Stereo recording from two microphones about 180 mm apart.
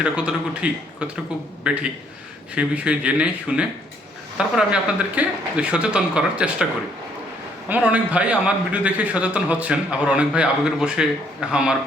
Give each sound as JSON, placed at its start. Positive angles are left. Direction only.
{"t": 0.0, "sound": "speech", "side_deg": -5}
{"t": 7.7, "sound": "a man's voice", "side_deg": -5}